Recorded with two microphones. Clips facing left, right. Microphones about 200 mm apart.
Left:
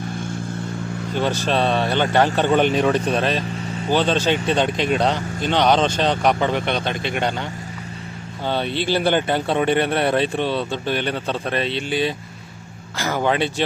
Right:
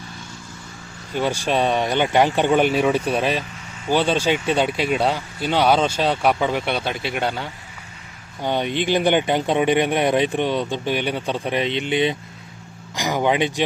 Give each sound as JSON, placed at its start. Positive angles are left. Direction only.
{"t": 1.1, "sound": "speech", "side_deg": -10}
{"t": 8.4, "sound": "speech", "side_deg": -15}